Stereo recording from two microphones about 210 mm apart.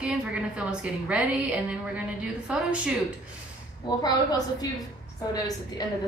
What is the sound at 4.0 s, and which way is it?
A woman's voice, 20° left (ahead or behind).